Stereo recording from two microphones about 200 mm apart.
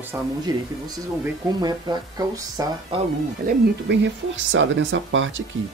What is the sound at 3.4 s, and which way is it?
Speech, 60° right (ahead or behind).